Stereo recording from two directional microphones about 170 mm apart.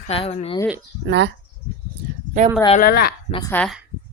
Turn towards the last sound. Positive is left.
turn(degrees=25)  # may be behind; listen again after turning